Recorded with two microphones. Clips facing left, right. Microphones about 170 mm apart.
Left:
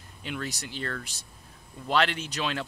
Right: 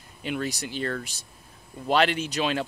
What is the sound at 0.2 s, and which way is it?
Speech, 10° right (ahead or behind).